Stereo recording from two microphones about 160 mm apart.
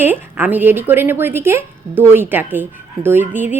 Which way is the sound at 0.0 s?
10° right (ahead or behind).